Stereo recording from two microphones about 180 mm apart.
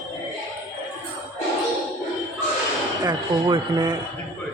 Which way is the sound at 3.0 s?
25° right (ahead or behind).